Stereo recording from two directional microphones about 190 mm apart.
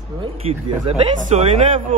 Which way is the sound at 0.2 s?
30° right (ahead or behind).